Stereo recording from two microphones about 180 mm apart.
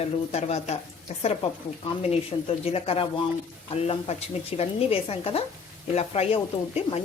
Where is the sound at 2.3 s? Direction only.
30° left (ahead or behind).